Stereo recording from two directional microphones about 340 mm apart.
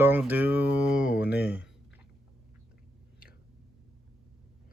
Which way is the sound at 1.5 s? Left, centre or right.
Centre.